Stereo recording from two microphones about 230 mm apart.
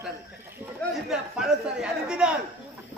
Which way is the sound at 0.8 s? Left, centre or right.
Centre.